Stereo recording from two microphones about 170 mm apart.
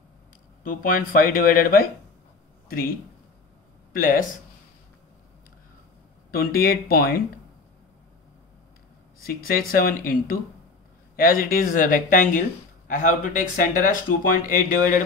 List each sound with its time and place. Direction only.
0.7 s speech: 55° left (ahead or behind)
3.9 s speech: 55° left (ahead or behind)
6.3 s speech: 60° left (ahead or behind)
9.2 s speech: 60° left (ahead or behind)
11.1 s speech: 55° left (ahead or behind)